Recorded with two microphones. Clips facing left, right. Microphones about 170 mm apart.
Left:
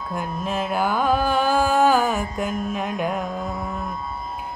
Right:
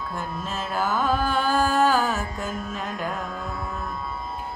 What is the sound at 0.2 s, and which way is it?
Music, 15° left (ahead or behind).